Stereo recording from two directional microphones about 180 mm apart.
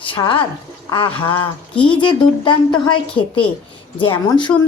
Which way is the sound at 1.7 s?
5° left (ahead or behind).